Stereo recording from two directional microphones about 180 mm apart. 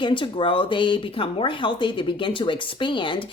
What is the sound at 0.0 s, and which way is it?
A woman's voice, 25° left (ahead or behind).